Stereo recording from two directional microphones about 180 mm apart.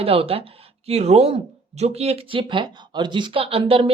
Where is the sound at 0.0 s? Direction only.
30° right (ahead or behind).